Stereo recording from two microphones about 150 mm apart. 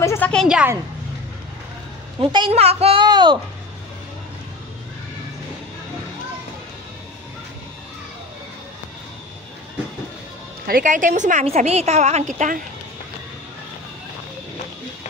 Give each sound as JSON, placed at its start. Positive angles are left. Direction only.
{"t": 0.0, "sound": "a sound", "side_deg": 20}
{"t": 0.3, "sound": "a woman's voice", "side_deg": 0}
{"t": 2.2, "sound": "speech", "side_deg": -40}
{"t": 10.7, "sound": "a woman's voice", "side_deg": -60}
{"t": 11.4, "sound": "a woman's voice", "side_deg": -45}